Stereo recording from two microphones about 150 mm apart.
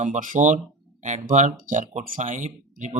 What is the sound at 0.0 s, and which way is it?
Speech, 55° right (ahead or behind).